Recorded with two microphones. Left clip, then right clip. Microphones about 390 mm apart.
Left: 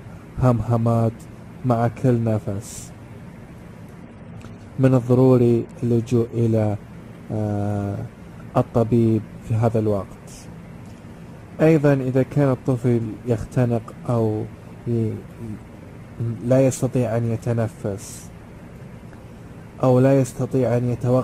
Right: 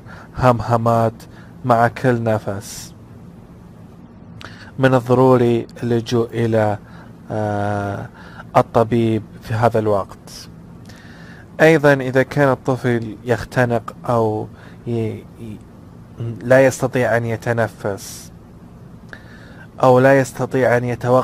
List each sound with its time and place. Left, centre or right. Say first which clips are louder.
0.4 s a man's voice: right 7 dB; right
4.8 s a man's voice: right 4 dB; right
11.5 s a man's voice: right 5 dB; right
16.4 s a man's voice: right 6 dB; right
19.8 s a man's voice: right 6 dB; right